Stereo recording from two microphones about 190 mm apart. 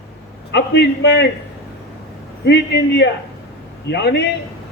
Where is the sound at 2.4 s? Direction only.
65° left (ahead or behind).